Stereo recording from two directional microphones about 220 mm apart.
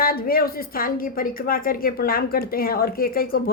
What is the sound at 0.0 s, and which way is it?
A woman's voice, 45° left (ahead or behind).